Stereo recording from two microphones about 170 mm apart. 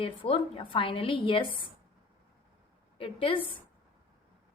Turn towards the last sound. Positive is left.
turn(degrees=30)  # may be behind; listen again after turning